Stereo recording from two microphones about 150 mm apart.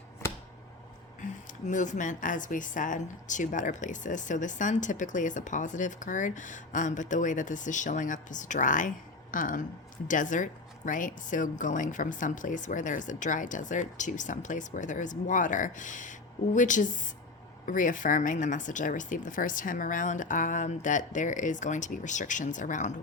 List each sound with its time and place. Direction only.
1.2 s speech: 55° left (ahead or behind)